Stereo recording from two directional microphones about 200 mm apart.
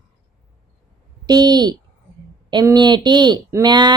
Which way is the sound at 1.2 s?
20° right (ahead or behind).